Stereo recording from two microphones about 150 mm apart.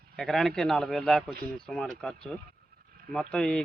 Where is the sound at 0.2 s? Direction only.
Centre (ahead or behind).